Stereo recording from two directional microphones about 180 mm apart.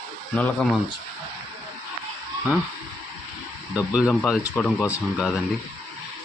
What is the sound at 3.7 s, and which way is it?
Speech, 5° right (ahead or behind).